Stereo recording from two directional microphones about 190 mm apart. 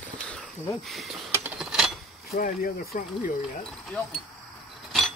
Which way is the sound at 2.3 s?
45° left (ahead or behind).